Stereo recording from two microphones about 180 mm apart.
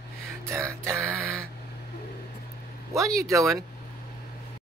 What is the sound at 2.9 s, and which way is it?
Speech, 15° right (ahead or behind).